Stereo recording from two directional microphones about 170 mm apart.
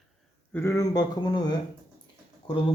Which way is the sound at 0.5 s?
15° left (ahead or behind).